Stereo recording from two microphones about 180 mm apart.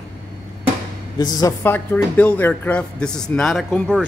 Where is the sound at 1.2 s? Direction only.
20° left (ahead or behind).